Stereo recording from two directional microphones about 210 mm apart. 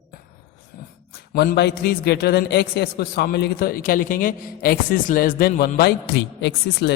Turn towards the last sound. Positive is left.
turn(degrees=55)  # may be behind; listen again after turning